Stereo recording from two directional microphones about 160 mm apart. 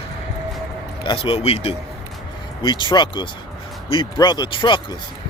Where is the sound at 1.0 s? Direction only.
35° left (ahead or behind).